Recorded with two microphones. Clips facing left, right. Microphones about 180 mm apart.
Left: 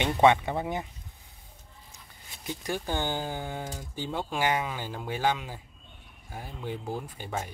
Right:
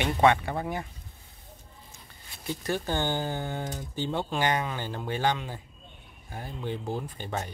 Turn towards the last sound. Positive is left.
turn(degrees=5)  # may be behind; listen again after turning